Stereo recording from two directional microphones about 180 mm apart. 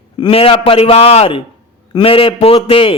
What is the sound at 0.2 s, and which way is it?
Speech, 30° left (ahead or behind).